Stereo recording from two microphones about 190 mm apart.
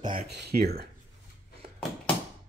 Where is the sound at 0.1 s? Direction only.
60° right (ahead or behind).